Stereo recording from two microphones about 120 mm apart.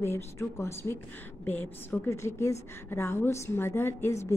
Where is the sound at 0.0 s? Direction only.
20° left (ahead or behind).